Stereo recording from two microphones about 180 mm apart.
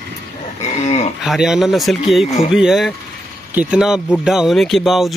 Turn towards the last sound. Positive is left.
turn(degrees=0)  # may be behind; listen again after turning